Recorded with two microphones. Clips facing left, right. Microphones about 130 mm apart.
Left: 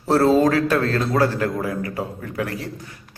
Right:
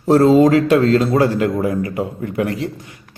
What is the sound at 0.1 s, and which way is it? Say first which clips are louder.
A man's voice: right 5 dB; 15° right (ahead or behind).